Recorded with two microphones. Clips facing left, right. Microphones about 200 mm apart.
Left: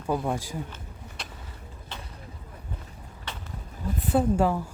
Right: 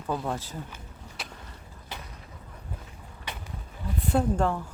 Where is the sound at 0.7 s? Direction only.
5° right (ahead or behind).